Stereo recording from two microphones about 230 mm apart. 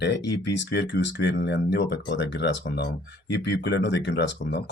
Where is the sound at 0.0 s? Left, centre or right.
Left.